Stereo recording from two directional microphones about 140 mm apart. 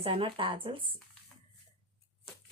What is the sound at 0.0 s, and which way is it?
Speech, 40° right (ahead or behind).